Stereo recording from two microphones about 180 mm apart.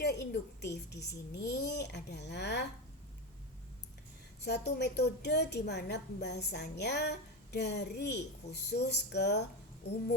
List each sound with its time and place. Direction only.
0.0 s a woman's voice: 70° left (ahead or behind)
4.4 s a woman's voice: 65° left (ahead or behind)